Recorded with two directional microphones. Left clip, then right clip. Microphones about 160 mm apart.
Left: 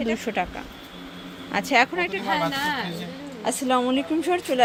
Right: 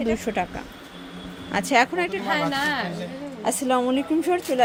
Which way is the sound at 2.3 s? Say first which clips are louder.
Right 1 dB; 35° right (ahead or behind).